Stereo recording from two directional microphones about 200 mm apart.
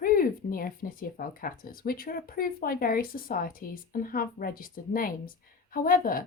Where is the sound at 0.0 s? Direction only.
45° left (ahead or behind).